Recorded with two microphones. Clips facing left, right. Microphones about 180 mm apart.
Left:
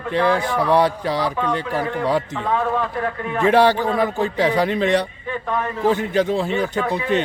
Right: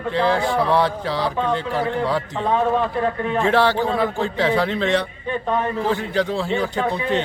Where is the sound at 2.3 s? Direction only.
20° right (ahead or behind).